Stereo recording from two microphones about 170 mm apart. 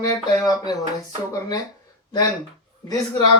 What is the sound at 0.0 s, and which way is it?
Speech, 20° left (ahead or behind).